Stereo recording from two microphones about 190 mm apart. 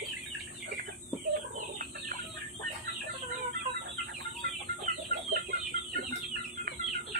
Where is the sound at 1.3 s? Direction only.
50° right (ahead or behind).